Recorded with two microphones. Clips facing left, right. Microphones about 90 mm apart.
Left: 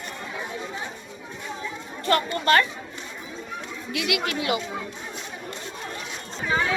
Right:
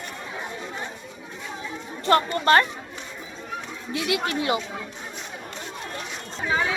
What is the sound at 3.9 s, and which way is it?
Speech, 30° right (ahead or behind).